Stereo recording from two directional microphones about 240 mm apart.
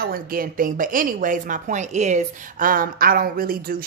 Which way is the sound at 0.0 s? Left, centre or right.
Right.